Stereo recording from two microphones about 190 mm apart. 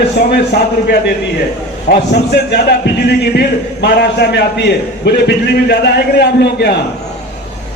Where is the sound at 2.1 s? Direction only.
60° left (ahead or behind).